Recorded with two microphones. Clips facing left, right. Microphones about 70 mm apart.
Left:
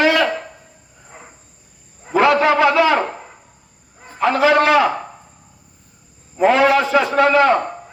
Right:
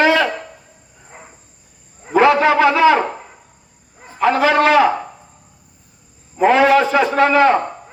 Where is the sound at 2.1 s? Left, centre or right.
Right.